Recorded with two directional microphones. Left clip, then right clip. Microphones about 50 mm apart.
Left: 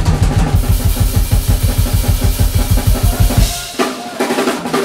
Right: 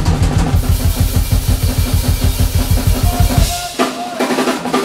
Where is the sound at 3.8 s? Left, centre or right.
Left.